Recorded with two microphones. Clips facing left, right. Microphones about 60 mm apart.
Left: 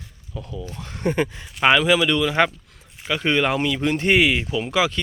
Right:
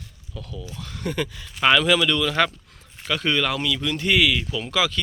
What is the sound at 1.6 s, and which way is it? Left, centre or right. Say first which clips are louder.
Speech: left 2 dB; centre.